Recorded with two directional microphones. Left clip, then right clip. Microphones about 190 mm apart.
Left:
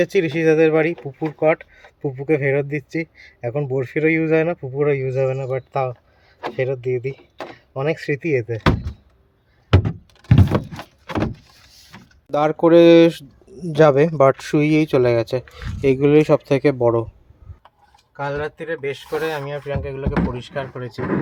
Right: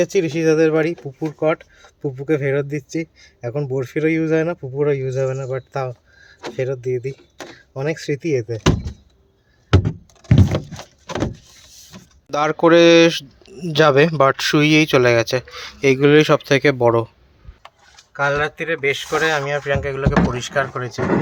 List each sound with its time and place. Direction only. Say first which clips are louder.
0.0 s speech: even; 5° left (ahead or behind)
9.6 s power windows: right 1 dB; 35° left (ahead or behind)
12.3 s speech: even; 10° left (ahead or behind)
18.2 s speech: right 6 dB; 15° right (ahead or behind)